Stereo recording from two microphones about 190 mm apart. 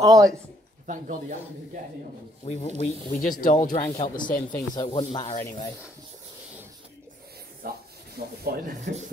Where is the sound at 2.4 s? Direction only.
35° left (ahead or behind).